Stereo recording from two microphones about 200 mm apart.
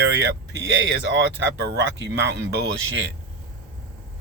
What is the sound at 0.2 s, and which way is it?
Speech, 60° right (ahead or behind).